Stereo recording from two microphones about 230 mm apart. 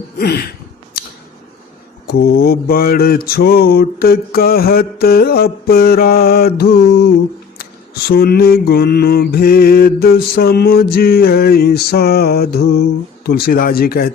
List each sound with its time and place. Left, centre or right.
0.2 s mantra: left
2.0 s mantra: left